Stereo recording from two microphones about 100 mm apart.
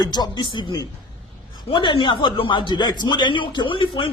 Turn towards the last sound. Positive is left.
turn(degrees=60)  # may be behind; listen again after turning